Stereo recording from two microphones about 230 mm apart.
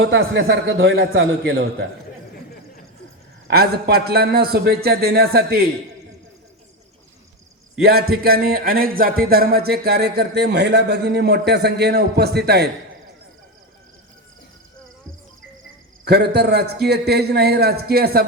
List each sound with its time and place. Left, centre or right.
0.0 s speech: right
3.4 s speech: right
8.1 s speech: right
16.0 s speech: right